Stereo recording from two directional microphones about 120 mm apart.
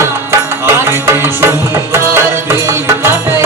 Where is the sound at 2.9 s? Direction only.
20° right (ahead or behind).